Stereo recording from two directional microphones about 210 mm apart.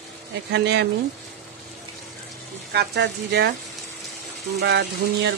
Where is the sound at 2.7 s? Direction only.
55° right (ahead or behind).